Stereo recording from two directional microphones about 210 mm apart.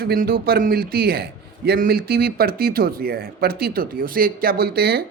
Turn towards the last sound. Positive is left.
turn(degrees=-45)  # may be behind; listen again after turning